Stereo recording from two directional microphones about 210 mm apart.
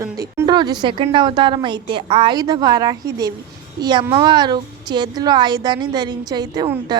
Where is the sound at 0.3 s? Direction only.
20° right (ahead or behind).